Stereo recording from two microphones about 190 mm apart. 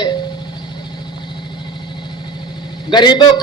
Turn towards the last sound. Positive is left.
turn(degrees=25)  # may be behind; listen again after turning